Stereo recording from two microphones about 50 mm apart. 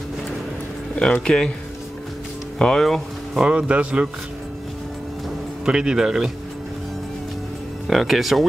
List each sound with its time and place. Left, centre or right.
0.9 s speech: centre
2.6 s speech: centre
3.3 s speech: centre
5.7 s speech: centre
7.8 s speech: centre